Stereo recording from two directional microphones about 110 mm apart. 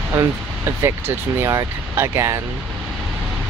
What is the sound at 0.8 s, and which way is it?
Speech, 25° right (ahead or behind).